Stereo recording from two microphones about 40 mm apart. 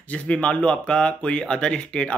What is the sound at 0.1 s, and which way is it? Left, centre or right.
Speech, left.